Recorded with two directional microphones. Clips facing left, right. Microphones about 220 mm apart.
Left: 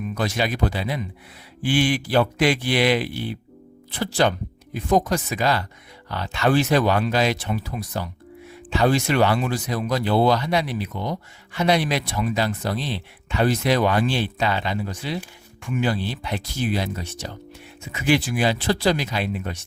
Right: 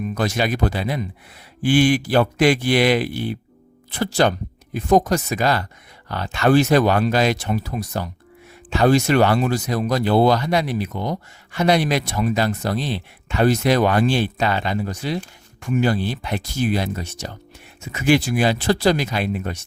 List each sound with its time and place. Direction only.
0.1 s speech: 45° right (ahead or behind)